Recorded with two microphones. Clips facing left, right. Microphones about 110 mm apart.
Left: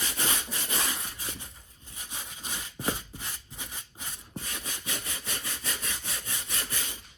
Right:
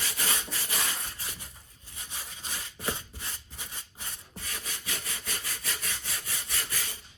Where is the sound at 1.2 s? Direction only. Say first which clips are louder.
Left 2 dB; 20° left (ahead or behind).